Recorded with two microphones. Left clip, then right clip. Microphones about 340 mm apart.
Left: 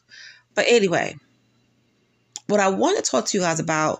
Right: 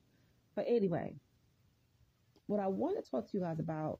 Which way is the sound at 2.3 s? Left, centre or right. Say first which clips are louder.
Left 17 dB; right.